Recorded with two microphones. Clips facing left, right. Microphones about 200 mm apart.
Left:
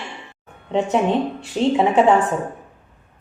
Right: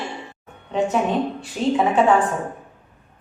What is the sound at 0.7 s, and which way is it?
A woman's voice, 25° left (ahead or behind).